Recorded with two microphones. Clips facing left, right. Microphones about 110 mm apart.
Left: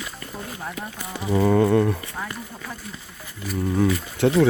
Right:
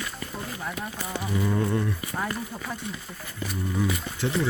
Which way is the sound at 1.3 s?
75° left (ahead or behind).